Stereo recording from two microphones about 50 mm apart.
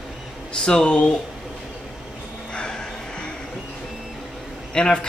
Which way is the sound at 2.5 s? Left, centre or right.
Centre.